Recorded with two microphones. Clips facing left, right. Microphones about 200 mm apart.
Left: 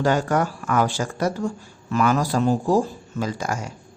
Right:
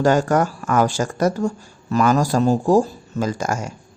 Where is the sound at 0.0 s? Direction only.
45° right (ahead or behind).